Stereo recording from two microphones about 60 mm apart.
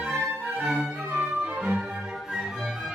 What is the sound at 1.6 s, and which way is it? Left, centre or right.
Music, centre.